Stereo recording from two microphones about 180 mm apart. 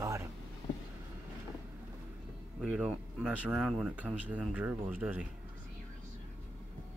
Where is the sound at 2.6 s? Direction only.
5° right (ahead or behind).